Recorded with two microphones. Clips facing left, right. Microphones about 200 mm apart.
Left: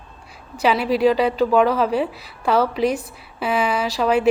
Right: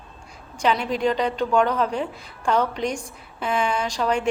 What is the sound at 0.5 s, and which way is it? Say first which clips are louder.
A woman's voice: left 4 dB; 5° left (ahead or behind).